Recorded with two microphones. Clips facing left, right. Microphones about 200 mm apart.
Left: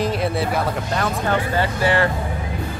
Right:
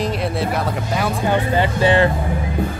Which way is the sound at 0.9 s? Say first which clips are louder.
Right 3 dB; 10° right (ahead or behind).